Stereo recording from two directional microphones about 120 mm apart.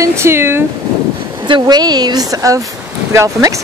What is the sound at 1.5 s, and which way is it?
Speech, 35° right (ahead or behind).